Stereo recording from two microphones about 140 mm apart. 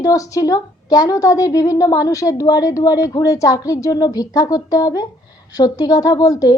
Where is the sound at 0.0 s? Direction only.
25° left (ahead or behind).